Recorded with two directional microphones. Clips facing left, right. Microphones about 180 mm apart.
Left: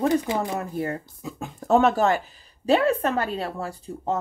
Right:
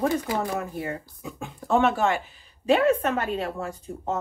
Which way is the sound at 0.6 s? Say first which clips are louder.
Left 3 dB; 40° left (ahead or behind).